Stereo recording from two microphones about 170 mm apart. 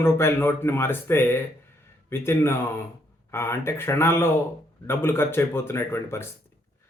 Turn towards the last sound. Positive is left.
turn(degrees=15)  # may be behind; listen again after turning